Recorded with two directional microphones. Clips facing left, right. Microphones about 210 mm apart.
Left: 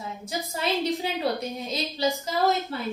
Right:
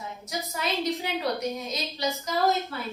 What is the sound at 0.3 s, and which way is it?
A woman's voice, 30° left (ahead or behind).